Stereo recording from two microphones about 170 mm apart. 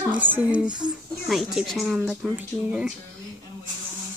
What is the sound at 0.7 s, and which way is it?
Speech, 25° right (ahead or behind).